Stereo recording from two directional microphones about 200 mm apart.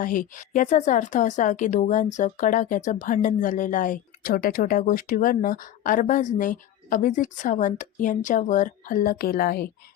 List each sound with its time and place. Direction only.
0.0 s a woman's voice: 40° left (ahead or behind)